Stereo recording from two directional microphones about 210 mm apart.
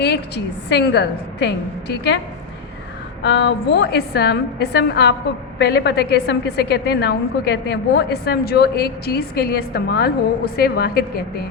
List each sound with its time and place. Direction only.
0.0 s a woman's voice: 55° left (ahead or behind)
3.2 s a woman's voice: 55° left (ahead or behind)